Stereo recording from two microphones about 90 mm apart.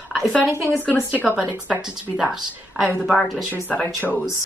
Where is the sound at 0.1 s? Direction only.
5° left (ahead or behind).